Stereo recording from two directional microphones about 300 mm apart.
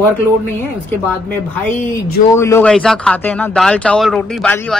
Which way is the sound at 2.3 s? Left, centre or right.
Centre.